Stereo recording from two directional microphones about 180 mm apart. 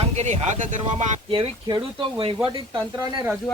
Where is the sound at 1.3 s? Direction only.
30° right (ahead or behind).